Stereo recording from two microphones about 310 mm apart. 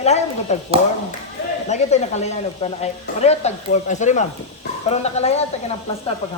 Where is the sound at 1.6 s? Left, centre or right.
Left.